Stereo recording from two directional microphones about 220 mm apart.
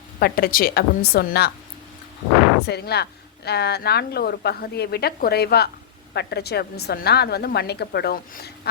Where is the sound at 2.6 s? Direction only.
45° left (ahead or behind).